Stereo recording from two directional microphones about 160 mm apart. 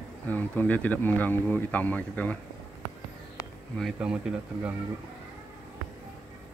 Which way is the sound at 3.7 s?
Centre (ahead or behind).